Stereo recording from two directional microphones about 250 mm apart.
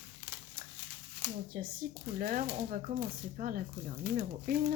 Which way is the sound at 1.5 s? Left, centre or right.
Right.